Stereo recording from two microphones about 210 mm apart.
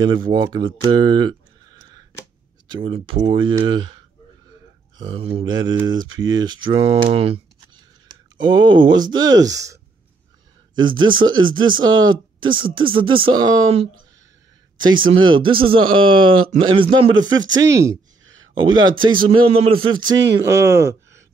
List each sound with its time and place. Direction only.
0.0 s speech: 20° right (ahead or behind)
5.1 s speech: 25° right (ahead or behind)
10.8 s speech: 20° right (ahead or behind)
18.2 s a sound: 65° right (ahead or behind)
18.5 s speech: 20° right (ahead or behind)